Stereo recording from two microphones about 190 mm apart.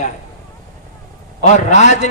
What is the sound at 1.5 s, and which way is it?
Speech, 40° left (ahead or behind).